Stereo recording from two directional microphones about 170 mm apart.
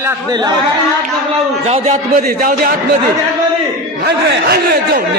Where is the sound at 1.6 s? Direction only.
40° right (ahead or behind).